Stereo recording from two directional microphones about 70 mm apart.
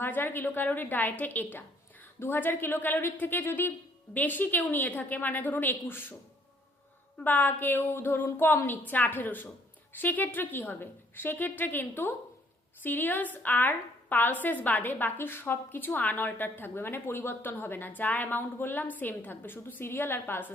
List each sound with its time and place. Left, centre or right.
0.0 s a woman's voice: left
7.3 s a woman's voice: left